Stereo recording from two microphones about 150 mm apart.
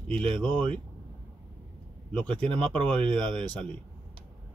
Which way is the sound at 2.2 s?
5° left (ahead or behind).